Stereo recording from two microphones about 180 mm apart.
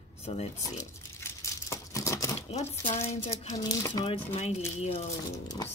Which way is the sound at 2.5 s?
35° left (ahead or behind).